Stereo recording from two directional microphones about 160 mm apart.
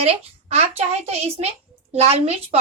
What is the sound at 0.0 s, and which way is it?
Speech, 40° right (ahead or behind).